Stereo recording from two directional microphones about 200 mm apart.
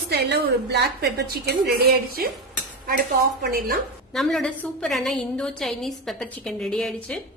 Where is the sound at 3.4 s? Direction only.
50° right (ahead or behind).